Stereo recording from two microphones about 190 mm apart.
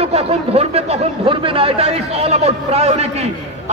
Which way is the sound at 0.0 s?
30° right (ahead or behind).